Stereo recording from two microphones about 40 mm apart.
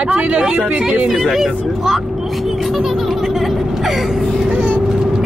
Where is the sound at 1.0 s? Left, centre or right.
Centre.